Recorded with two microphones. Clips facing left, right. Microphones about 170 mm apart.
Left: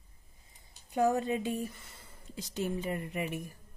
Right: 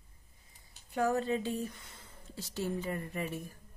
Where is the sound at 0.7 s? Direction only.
15° left (ahead or behind).